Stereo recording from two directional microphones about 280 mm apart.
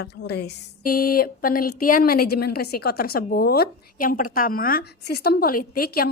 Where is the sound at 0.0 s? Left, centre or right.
Left.